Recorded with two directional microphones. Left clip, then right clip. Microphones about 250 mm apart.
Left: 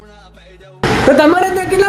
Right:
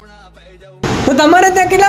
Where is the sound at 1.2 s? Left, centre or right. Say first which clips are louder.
Right 3 dB; right.